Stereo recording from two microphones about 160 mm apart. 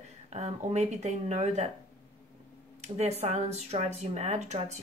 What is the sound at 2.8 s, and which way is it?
A woman's voice, 40° right (ahead or behind).